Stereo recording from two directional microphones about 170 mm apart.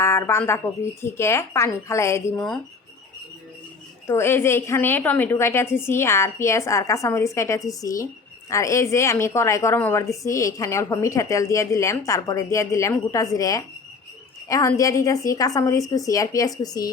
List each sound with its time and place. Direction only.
0.0 s a woman's voice: 15° left (ahead or behind)
2.3 s speech: 5° left (ahead or behind)
4.0 s a woman's voice: 15° left (ahead or behind)